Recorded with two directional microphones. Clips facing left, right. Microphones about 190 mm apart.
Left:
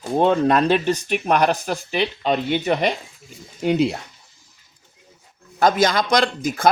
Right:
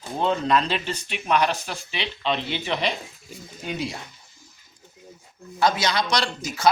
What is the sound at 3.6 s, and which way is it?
Speech, 65° left (ahead or behind).